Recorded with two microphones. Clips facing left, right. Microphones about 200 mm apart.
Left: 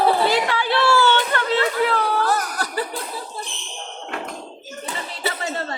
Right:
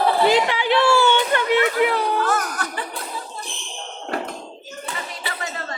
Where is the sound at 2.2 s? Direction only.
35° left (ahead or behind).